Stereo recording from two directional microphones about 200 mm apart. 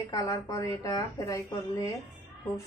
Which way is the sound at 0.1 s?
20° left (ahead or behind).